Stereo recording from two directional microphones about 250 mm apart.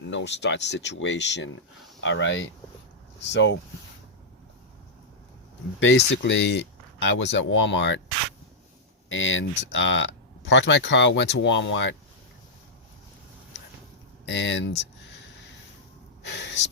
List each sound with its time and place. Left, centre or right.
0.1 s speech: left
5.8 s speech: left
9.0 s speech: left
14.3 s speech: left
16.2 s gasp: left